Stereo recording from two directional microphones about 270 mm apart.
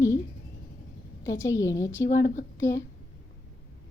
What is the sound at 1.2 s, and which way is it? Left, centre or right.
Speech, centre.